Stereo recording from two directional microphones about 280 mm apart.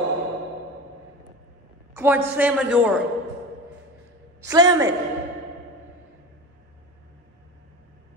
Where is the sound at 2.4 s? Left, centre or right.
Centre.